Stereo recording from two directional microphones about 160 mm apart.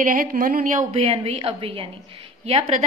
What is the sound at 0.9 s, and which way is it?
A woman's voice, 35° right (ahead or behind).